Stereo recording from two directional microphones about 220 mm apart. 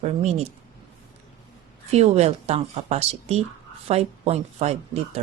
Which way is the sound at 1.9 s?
30° right (ahead or behind).